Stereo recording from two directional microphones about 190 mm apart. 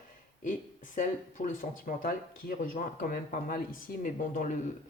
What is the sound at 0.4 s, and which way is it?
Speech, 45° left (ahead or behind).